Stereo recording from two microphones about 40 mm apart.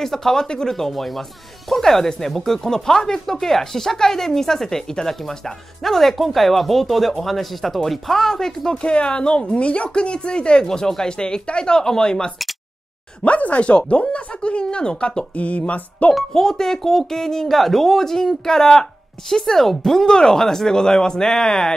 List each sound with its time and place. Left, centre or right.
0.0 s speech: centre
8.8 s speech: left
13.2 s speech: left
16.3 s speech: centre